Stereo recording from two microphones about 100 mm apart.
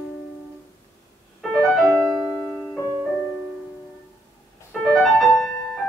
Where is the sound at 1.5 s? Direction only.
10° left (ahead or behind).